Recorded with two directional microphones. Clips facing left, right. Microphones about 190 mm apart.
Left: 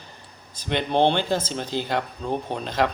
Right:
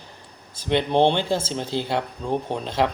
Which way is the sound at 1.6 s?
10° left (ahead or behind).